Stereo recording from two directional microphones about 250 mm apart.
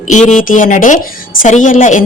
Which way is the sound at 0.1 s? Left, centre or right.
Left.